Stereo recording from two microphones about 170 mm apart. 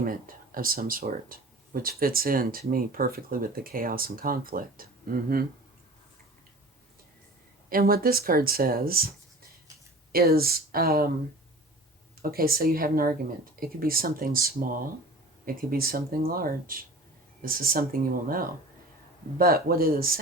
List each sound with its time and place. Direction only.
0.0 s speech: 55° right (ahead or behind)
7.7 s speech: 60° right (ahead or behind)
10.1 s speech: 60° right (ahead or behind)
12.2 s speech: 60° right (ahead or behind)